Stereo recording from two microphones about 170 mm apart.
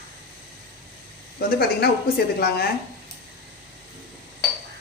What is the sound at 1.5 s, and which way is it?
Speech, 70° left (ahead or behind).